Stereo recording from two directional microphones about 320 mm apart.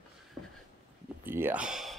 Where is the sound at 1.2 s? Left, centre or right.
Centre.